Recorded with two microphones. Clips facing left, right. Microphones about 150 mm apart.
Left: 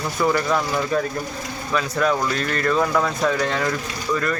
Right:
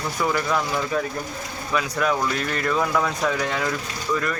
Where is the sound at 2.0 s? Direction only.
5° right (ahead or behind).